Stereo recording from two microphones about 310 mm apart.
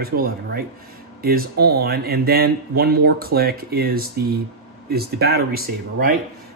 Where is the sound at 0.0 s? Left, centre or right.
Right.